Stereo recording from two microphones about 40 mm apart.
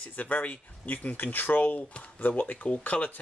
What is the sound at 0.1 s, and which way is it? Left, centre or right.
Speech, left.